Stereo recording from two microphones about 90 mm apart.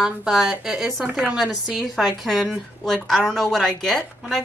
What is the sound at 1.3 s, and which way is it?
A woman's voice, 5° right (ahead or behind).